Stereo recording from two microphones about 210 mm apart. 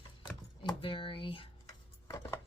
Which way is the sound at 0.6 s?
25° left (ahead or behind).